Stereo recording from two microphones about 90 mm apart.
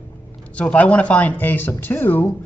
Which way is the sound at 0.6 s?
15° left (ahead or behind).